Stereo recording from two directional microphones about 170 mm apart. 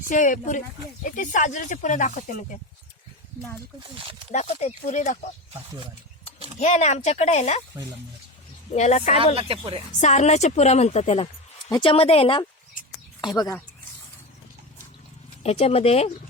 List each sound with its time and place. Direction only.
0.0 s speech: 50° left (ahead or behind)
4.3 s speech: 45° left (ahead or behind)
5.5 s speech: 30° right (ahead or behind)
6.6 s a woman's voice: 40° left (ahead or behind)
8.7 s a woman's voice: 40° left (ahead or behind)
9.1 s speech: 30° right (ahead or behind)
10.0 s a woman's voice: 40° left (ahead or behind)
13.2 s speech: 20° left (ahead or behind)
15.4 s a woman's voice: 35° left (ahead or behind)